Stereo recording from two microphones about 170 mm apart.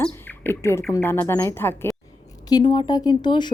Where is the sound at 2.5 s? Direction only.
30° left (ahead or behind).